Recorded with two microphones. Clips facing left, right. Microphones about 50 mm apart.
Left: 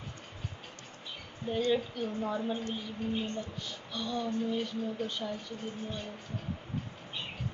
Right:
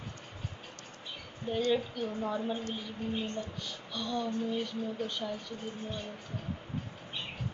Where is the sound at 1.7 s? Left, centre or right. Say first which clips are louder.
Even; centre.